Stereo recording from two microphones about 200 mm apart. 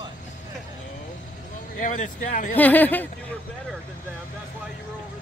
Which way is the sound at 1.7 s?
40° left (ahead or behind).